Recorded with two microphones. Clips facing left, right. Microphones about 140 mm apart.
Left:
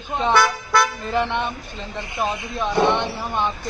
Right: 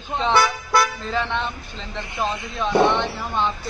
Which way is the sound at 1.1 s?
15° left (ahead or behind).